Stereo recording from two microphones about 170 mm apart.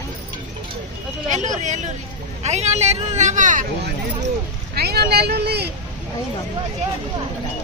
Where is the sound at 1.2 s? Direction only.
45° right (ahead or behind).